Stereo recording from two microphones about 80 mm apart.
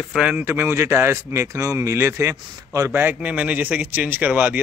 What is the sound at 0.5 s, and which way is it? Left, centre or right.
A man's voice, right.